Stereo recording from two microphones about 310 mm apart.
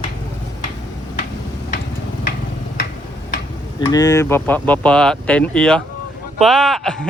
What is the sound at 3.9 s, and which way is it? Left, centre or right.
Speech, centre.